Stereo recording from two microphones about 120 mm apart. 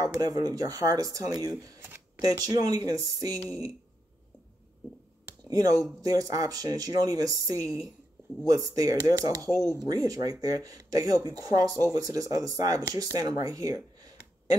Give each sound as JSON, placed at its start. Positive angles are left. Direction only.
{"t": 0.2, "sound": "speech", "side_deg": -30}
{"t": 5.5, "sound": "speech", "side_deg": -30}